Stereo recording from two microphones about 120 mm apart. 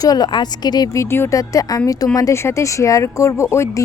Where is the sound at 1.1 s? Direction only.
25° left (ahead or behind).